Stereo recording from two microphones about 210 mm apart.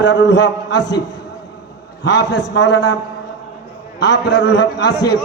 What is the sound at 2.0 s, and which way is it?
Speech, 55° left (ahead or behind).